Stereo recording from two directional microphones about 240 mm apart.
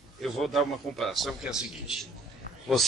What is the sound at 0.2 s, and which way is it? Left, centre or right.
Speech, centre.